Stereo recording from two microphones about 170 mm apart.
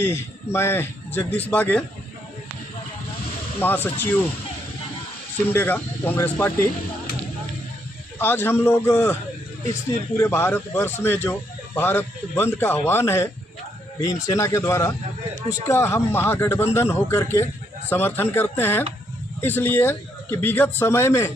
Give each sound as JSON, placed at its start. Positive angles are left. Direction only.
{"t": 0.0, "sound": "speech", "side_deg": 15}
{"t": 3.6, "sound": "speech", "side_deg": 10}
{"t": 5.5, "sound": "speech", "side_deg": 10}
{"t": 8.2, "sound": "speech", "side_deg": 15}
{"t": 10.2, "sound": "a man's voice", "side_deg": 15}